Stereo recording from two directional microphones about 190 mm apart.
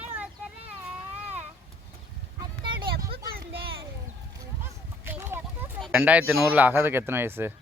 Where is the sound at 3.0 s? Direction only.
55° right (ahead or behind).